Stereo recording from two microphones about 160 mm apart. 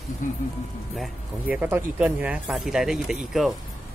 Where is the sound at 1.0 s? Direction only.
10° right (ahead or behind).